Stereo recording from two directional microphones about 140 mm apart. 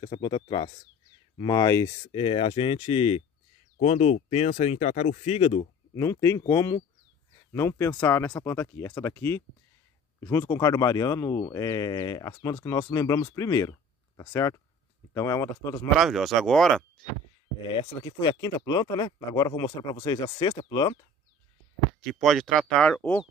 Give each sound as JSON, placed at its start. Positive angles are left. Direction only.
{"t": 0.0, "sound": "speech", "side_deg": 35}
{"t": 2.1, "sound": "speech", "side_deg": 40}
{"t": 3.8, "sound": "speech", "side_deg": 55}
{"t": 5.9, "sound": "speech", "side_deg": 20}
{"t": 16.0, "sound": "speech", "side_deg": 0}
{"t": 17.6, "sound": "speech", "side_deg": 35}
{"t": 20.4, "sound": "speech", "side_deg": 35}
{"t": 22.2, "sound": "speech", "side_deg": 5}